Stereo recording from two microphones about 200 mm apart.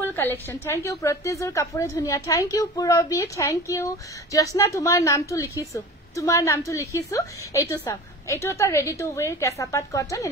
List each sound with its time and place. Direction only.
0.0 s a woman's voice: 10° left (ahead or behind)